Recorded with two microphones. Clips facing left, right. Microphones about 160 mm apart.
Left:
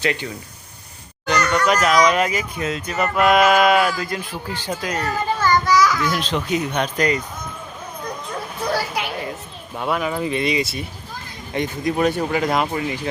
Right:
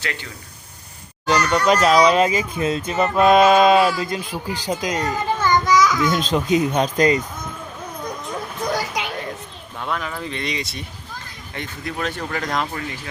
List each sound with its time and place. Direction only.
0.0 s speech: 20° left (ahead or behind)
1.3 s speech: 30° right (ahead or behind)
9.7 s speech: 10° left (ahead or behind)
11.5 s speech: 15° left (ahead or behind)